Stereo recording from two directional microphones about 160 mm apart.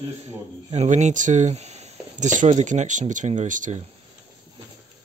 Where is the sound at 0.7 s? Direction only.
45° right (ahead or behind).